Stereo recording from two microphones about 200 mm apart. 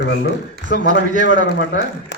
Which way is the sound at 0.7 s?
40° right (ahead or behind).